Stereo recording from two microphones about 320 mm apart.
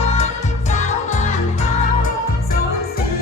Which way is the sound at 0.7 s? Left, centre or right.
Left.